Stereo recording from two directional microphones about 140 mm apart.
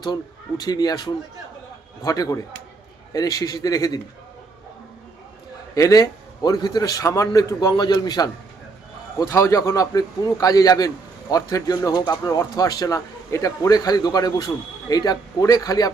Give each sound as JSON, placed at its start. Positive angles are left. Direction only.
{"t": 0.0, "sound": "a man's voice", "side_deg": 30}
{"t": 5.7, "sound": "a man's voice", "side_deg": 25}